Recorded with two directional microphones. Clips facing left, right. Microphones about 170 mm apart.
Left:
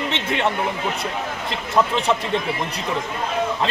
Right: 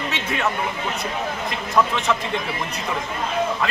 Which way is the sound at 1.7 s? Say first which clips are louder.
Left 1 dB; 30° left (ahead or behind).